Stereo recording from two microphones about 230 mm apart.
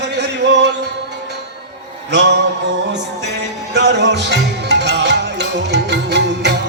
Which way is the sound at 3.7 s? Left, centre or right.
Right.